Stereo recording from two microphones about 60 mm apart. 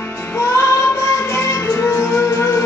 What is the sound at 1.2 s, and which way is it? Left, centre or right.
Music, left.